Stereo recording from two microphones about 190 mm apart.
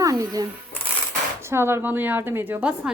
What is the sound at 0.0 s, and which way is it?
Shuffling cards, 15° right (ahead or behind).